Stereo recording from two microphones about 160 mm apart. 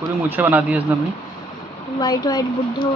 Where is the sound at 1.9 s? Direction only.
25° left (ahead or behind).